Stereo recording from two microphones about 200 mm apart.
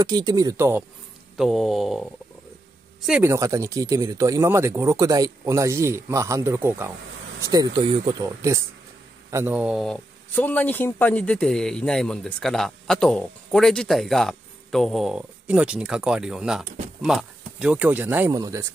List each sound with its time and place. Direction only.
0.0 s speech: 20° right (ahead or behind)
1.3 s speech: centre (ahead or behind)
3.1 s speech: 10° right (ahead or behind)